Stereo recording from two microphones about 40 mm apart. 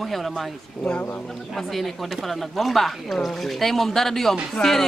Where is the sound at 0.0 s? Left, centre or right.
Centre.